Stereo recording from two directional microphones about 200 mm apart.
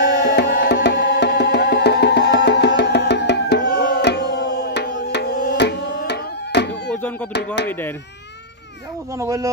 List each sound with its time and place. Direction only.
0.2 s music: 55° left (ahead or behind)
6.7 s a sound: 10° left (ahead or behind)
9.1 s speech: 15° right (ahead or behind)